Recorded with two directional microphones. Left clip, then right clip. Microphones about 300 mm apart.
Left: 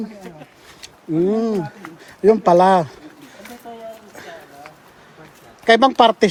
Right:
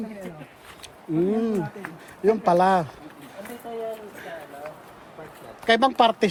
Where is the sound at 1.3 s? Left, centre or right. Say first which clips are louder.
Left 5 dB; centre.